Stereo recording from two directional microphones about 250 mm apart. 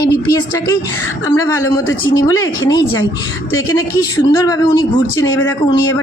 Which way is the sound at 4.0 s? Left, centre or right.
Centre.